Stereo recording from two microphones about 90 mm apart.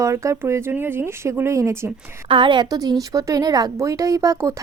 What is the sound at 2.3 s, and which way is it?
A woman's voice, 65° right (ahead or behind).